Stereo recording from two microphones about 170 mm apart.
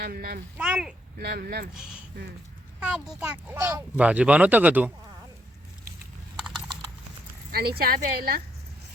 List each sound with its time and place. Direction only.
0.0 s a woman's voice: 60° right (ahead or behind)
0.5 s speech: 5° right (ahead or behind)
1.2 s a woman's voice: 65° right (ahead or behind)
1.7 s speech: 5° right (ahead or behind)
7.5 s a woman's voice: 65° right (ahead or behind)